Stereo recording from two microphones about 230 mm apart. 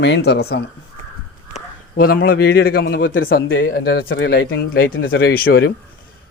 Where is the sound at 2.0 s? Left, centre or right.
Left.